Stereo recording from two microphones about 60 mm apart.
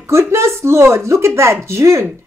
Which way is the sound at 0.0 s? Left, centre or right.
Right.